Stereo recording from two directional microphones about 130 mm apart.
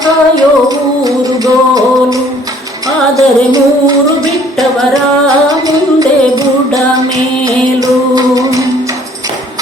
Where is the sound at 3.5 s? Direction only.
30° right (ahead or behind).